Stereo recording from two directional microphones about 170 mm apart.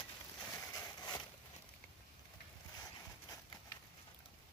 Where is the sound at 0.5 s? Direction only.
20° left (ahead or behind).